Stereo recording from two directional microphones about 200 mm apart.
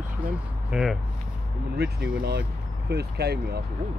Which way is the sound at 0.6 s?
5° right (ahead or behind).